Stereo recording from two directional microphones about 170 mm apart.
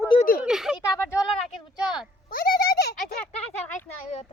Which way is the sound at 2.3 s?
60° left (ahead or behind).